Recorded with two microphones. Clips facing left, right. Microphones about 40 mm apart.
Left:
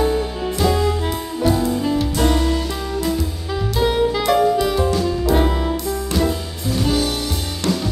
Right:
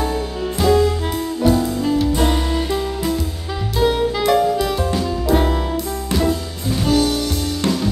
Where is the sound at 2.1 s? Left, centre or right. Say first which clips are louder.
Even; centre.